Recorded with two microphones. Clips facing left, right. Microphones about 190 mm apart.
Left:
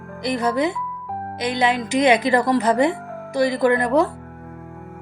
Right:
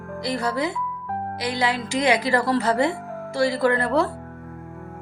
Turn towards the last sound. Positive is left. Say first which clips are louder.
# left 3 dB
turn(degrees=15)  # may be behind; listen again after turning